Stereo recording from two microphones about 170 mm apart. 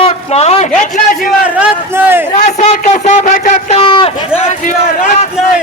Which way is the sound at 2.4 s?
45° left (ahead or behind).